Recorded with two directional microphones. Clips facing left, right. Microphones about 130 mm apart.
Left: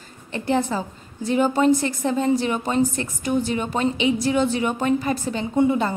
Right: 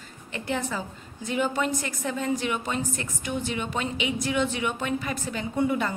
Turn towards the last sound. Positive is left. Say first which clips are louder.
# left 6 dB
turn(degrees=25)  # may be behind; listen again after turning